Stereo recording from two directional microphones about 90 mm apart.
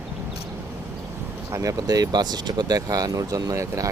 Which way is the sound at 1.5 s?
40° right (ahead or behind).